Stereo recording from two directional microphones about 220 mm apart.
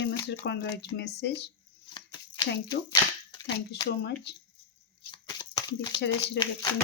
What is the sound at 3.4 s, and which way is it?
Speech, 50° left (ahead or behind).